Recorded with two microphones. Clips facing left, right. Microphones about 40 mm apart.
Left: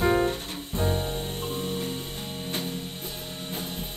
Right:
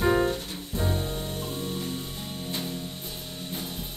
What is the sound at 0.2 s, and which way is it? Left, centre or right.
Music, left.